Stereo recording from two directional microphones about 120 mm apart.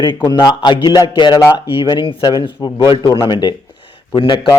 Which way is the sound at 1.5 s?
45° left (ahead or behind).